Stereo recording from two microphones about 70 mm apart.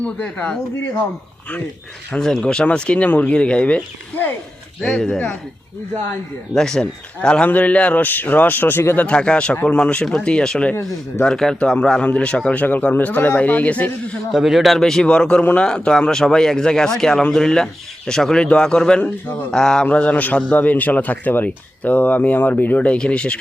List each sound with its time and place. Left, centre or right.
0.0 s a man's voice: centre
2.1 s a man's voice: centre
6.5 s a man's voice: centre; by 8.8 s left
9.0 s a man's voice: centre
14.3 s a man's voice: centre